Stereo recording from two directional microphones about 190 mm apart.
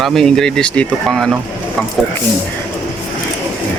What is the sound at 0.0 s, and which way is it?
Speech, centre (ahead or behind).